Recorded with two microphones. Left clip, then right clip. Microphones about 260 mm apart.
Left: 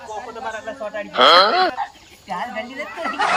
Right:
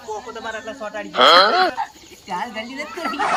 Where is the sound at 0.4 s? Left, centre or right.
Centre.